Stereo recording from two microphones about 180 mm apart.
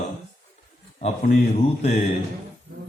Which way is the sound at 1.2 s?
40° left (ahead or behind).